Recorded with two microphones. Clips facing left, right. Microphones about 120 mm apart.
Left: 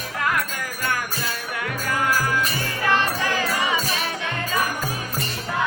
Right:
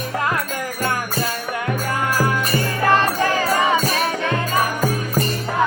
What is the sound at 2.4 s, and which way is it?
Music, 45° right (ahead or behind).